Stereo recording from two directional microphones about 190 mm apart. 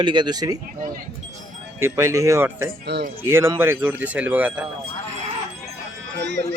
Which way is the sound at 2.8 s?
60° right (ahead or behind).